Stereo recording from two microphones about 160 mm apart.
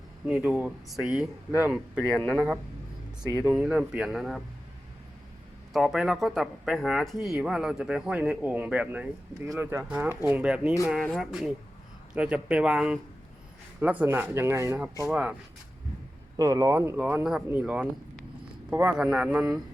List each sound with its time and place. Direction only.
0.3 s speech: 5° right (ahead or behind)
2.1 s speech: 10° left (ahead or behind)
3.4 s speech: 5° right (ahead or behind)
5.7 s speech: centre (ahead or behind); by 14.8 s 15° right (ahead or behind)
15.0 s speech: 5° right (ahead or behind)
16.4 s speech: 20° right (ahead or behind)